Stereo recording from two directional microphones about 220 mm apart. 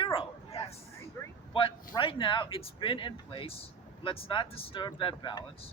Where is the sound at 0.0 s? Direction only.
25° left (ahead or behind).